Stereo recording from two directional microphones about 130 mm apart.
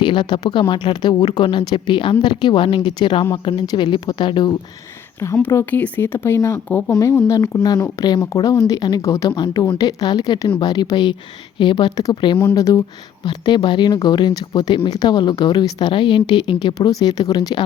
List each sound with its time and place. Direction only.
0.0 s speech: 40° left (ahead or behind)
5.2 s speech: 20° left (ahead or behind)